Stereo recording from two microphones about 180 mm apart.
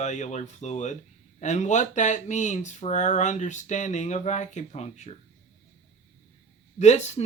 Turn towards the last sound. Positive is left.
turn(degrees=40)  # may be behind; listen again after turning